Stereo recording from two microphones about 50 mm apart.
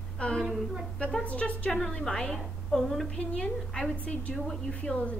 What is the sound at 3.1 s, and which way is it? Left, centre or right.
Speech, left.